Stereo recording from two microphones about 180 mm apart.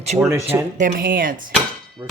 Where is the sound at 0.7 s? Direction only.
50° right (ahead or behind).